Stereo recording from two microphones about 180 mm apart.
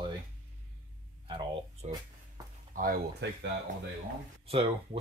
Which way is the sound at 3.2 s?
75° right (ahead or behind).